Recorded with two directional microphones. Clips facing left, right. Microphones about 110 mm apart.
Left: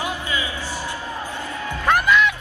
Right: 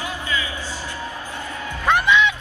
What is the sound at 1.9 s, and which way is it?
Music, 5° left (ahead or behind).